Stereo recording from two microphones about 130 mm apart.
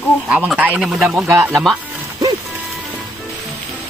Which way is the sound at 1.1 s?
15° right (ahead or behind).